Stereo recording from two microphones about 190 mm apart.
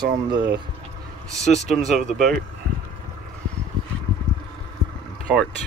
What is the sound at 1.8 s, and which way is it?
Speech, centre (ahead or behind).